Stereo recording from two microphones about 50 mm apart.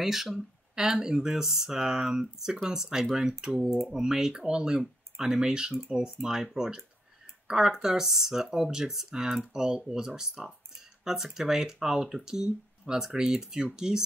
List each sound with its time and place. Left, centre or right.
0.0 s speech: centre